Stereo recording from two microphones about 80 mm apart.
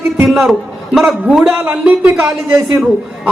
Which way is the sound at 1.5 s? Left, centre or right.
Centre.